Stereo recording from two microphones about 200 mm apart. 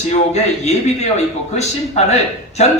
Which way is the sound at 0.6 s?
35° left (ahead or behind).